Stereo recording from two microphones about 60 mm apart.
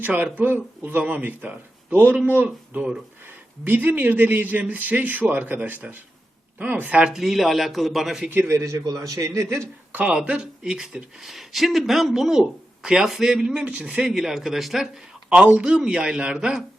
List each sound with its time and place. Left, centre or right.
0.0 s speech: right
7.0 s a man's voice: centre
8.3 s a man's voice: right
9.9 s a man's voice: right
14.1 s a man's voice: centre
15.3 s a man's voice: right